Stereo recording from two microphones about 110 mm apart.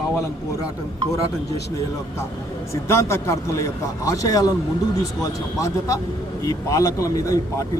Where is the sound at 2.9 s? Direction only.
25° left (ahead or behind).